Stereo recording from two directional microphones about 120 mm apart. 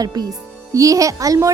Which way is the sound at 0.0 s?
35° right (ahead or behind).